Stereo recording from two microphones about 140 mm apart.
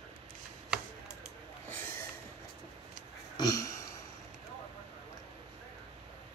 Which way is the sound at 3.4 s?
25° left (ahead or behind).